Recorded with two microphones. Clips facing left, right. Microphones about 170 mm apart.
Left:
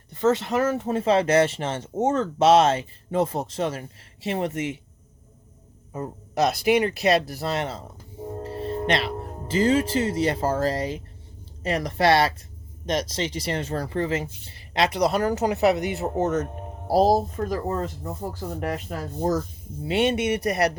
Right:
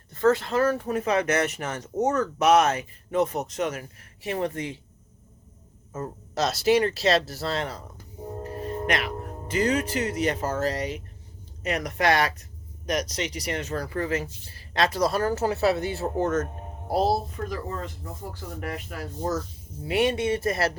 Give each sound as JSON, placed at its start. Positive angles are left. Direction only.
{"t": 0.1, "sound": "speech", "side_deg": 20}
{"t": 5.9, "sound": "speech", "side_deg": 15}
{"t": 16.8, "sound": "speech", "side_deg": 35}
{"t": 19.8, "sound": "speech", "side_deg": 25}